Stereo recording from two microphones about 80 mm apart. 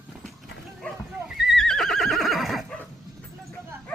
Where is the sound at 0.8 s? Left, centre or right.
Centre.